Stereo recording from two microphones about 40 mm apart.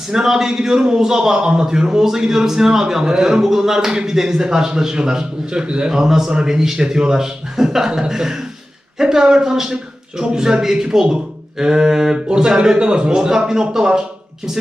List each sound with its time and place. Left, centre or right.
0.1 s speech: centre